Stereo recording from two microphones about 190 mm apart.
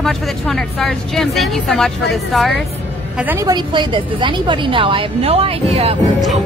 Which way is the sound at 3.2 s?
10° right (ahead or behind).